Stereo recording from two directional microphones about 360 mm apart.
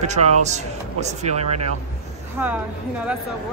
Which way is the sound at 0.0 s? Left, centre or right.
Centre.